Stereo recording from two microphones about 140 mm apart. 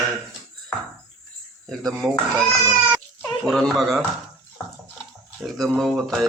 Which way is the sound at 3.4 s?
5° left (ahead or behind).